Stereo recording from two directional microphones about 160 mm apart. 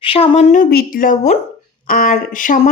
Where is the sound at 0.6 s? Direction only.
65° left (ahead or behind).